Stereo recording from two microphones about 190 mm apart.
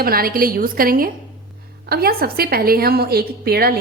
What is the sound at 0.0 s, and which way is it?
A woman's voice, 50° right (ahead or behind).